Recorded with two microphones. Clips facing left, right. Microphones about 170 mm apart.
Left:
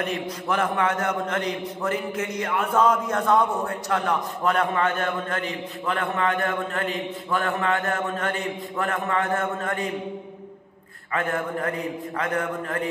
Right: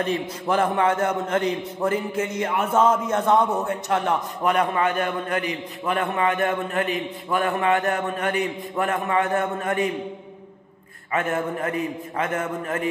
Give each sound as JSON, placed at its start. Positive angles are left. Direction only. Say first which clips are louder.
{"t": 0.0, "sound": "a man's voice", "louder": "right 3 dB", "side_deg": -30}
{"t": 11.1, "sound": "a man's voice", "louder": "right 2 dB", "side_deg": -20}